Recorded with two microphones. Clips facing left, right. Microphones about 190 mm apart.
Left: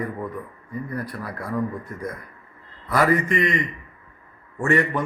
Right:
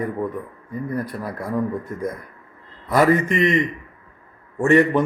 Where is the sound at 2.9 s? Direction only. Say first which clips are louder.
Right 3 dB; 20° right (ahead or behind).